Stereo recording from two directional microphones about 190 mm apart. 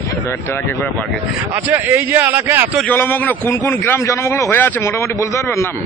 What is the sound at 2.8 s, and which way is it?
A man's voice, 10° left (ahead or behind).